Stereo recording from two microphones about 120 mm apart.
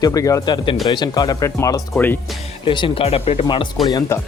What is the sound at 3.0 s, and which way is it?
Speech, 55° left (ahead or behind).